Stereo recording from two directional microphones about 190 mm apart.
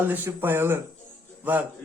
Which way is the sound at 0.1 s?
10° right (ahead or behind).